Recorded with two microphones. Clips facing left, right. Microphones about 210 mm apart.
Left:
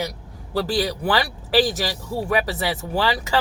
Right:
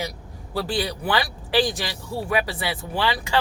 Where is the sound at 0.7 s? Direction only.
35° left (ahead or behind).